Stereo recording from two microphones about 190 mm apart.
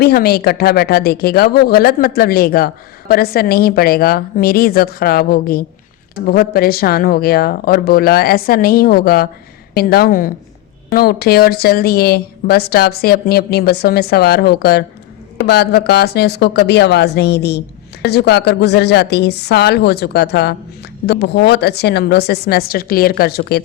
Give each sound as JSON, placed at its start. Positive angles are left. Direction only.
{"t": 0.0, "sound": "a woman's voice", "side_deg": 55}